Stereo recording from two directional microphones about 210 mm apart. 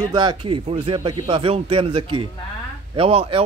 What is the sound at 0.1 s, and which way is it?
A man's voice, 20° right (ahead or behind).